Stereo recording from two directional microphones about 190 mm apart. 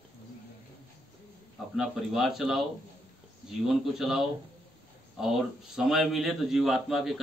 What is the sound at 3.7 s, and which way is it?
A man's voice, centre (ahead or behind).